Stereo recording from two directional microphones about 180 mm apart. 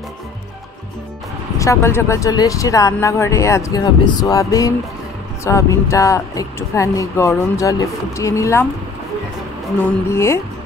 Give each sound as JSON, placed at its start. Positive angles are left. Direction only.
{"t": 1.6, "sound": "speech", "side_deg": 15}
{"t": 10.0, "sound": "speech", "side_deg": 15}